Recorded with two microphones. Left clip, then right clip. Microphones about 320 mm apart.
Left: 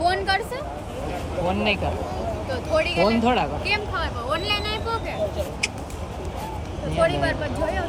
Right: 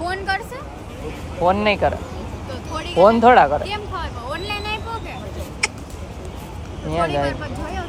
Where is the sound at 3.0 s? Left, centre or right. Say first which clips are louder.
Right 10 dB; right.